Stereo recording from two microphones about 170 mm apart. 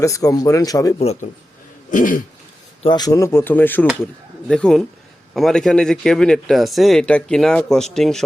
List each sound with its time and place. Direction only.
0.0 s speech: 20° left (ahead or behind)
0.9 s speech: 40° left (ahead or behind)
1.9 s throat clearing: 50° left (ahead or behind)
2.8 s speech: 25° left (ahead or behind); by 8.2 s centre (ahead or behind)